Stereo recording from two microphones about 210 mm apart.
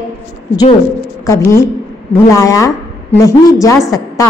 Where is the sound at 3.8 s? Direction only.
15° left (ahead or behind).